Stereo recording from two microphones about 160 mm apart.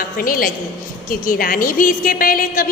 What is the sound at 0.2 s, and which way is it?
A woman's voice, 65° left (ahead or behind).